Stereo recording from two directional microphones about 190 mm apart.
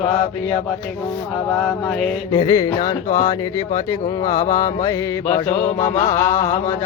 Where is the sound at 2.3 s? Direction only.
25° left (ahead or behind).